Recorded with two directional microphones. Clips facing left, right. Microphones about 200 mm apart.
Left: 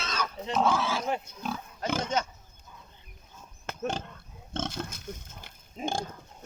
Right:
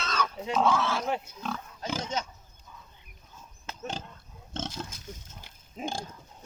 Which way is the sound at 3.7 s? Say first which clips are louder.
Left 5 dB; 55° left (ahead or behind).